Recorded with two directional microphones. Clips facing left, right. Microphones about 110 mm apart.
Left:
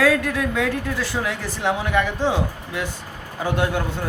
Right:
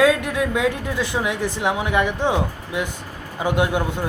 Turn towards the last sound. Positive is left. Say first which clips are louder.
# right 2 dB
turn(degrees=-15)  # may be behind; listen again after turning